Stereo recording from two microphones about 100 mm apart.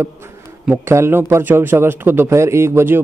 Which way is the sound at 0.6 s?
25° right (ahead or behind).